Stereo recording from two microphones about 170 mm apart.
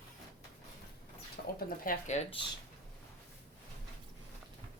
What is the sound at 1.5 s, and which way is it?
Speech, 55° left (ahead or behind).